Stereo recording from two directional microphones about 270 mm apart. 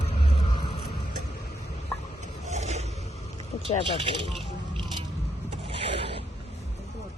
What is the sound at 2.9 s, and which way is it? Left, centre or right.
Vehicle, left.